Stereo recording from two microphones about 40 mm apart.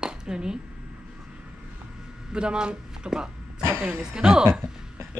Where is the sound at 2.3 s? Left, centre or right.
Right.